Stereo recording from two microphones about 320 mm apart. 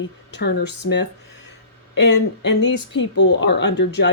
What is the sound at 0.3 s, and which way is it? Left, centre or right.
Speech, left.